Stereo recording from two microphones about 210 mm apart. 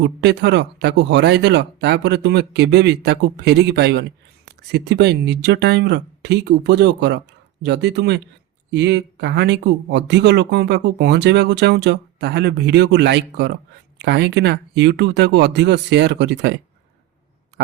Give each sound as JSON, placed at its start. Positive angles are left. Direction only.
{"t": 0.0, "sound": "speech", "side_deg": -55}